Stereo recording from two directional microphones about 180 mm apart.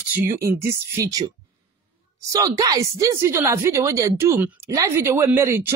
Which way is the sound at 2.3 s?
20° right (ahead or behind).